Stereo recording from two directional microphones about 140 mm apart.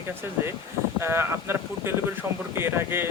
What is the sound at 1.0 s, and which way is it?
Speech, 20° right (ahead or behind).